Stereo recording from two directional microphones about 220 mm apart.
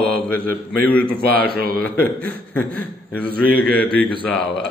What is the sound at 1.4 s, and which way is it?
Speech, 45° right (ahead or behind).